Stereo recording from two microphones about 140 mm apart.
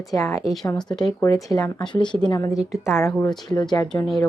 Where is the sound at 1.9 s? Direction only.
35° left (ahead or behind); by 3.1 s 20° left (ahead or behind).